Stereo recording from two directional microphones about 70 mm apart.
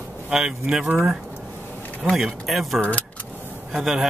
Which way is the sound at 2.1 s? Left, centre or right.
Centre.